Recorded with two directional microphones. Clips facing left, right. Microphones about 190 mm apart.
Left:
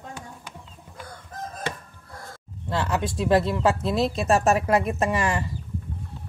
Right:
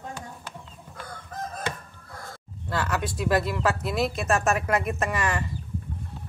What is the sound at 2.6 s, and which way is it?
Speech, 25° left (ahead or behind).